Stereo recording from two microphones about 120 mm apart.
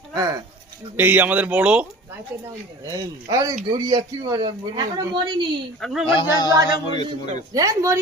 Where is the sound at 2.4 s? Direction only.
30° right (ahead or behind).